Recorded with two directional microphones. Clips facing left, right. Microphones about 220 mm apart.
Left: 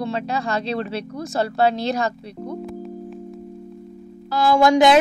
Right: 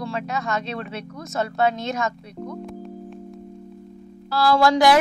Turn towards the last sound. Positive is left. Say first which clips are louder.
# left 2 dB
turn(degrees=20)  # may be behind; listen again after turning